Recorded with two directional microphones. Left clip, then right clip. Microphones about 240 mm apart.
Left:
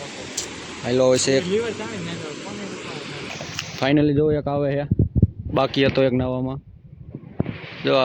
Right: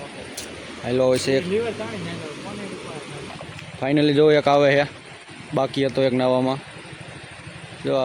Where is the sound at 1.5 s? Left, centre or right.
Centre.